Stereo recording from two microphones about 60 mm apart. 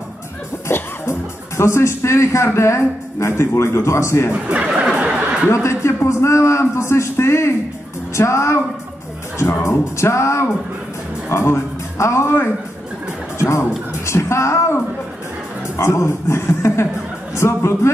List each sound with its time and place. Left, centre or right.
0.7 s music: left
1.6 s a man's voice: left
4.3 s speech: centre
4.9 s a sound: right
5.5 s a man's voice: left
9.7 s a man's voice: left